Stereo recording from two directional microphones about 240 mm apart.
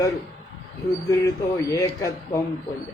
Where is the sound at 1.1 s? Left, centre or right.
Centre.